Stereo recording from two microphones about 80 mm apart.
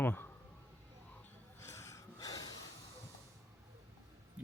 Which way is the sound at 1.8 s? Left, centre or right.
Left.